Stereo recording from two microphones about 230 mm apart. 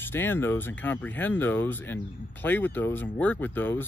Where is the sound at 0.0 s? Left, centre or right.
Centre.